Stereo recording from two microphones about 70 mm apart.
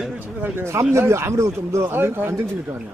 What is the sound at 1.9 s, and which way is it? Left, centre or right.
Speech, right.